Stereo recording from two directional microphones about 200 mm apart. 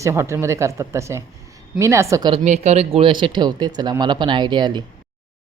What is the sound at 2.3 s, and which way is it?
Speech, 35° right (ahead or behind).